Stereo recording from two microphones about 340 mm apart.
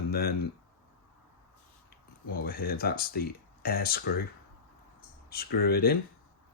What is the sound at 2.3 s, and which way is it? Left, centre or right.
Speech, left.